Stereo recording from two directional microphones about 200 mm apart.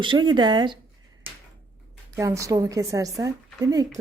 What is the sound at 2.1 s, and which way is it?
A woman's voice, 15° right (ahead or behind).